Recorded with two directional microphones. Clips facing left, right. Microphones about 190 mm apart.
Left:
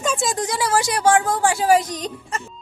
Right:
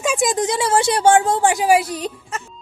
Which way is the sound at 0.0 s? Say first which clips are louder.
Right 4 dB; 15° right (ahead or behind).